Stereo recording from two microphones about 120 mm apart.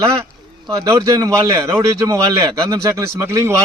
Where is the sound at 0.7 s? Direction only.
30° right (ahead or behind).